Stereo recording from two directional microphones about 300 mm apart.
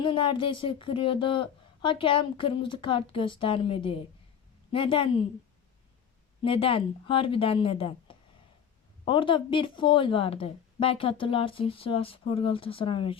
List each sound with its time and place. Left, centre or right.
0.0 s a woman's voice: centre
6.4 s a woman's voice: centre